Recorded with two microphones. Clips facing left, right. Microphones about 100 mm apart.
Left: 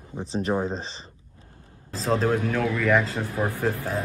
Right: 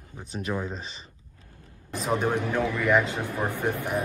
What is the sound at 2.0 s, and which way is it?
A man's voice, 20° right (ahead or behind).